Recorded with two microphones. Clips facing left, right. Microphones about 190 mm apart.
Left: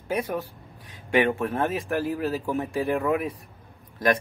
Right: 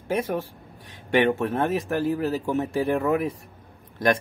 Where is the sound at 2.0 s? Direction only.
30° right (ahead or behind).